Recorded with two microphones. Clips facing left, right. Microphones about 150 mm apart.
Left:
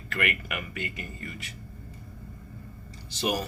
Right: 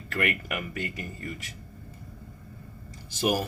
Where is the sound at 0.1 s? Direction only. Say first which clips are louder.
Right 2 dB; 40° right (ahead or behind).